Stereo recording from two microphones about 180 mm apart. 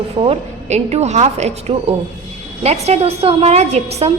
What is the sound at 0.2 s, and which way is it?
A woman's voice, 35° right (ahead or behind).